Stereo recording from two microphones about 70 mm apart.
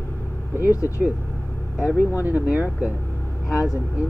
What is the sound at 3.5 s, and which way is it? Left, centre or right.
Speech, left.